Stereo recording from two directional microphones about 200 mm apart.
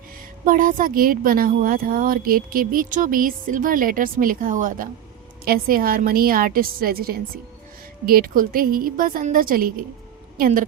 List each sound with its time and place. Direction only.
0.4 s speech: 45° right (ahead or behind)